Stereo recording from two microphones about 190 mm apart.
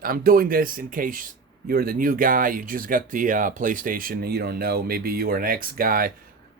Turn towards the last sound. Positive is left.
turn(degrees=-50)  # may be behind; listen again after turning